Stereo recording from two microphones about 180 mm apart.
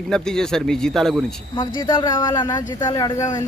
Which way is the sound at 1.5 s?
25° left (ahead or behind).